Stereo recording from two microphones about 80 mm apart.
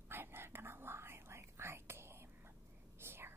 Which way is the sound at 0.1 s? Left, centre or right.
Right.